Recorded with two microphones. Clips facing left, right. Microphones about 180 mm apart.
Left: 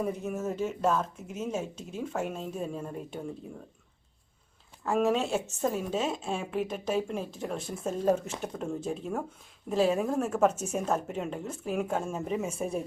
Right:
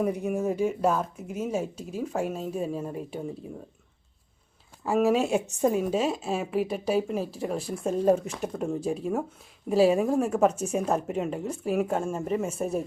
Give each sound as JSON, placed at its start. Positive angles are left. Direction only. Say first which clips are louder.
{"t": 0.0, "sound": "speech", "louder": "right 5 dB", "side_deg": -15}
{"t": 4.8, "sound": "a woman's voice", "louder": "right 3 dB", "side_deg": -5}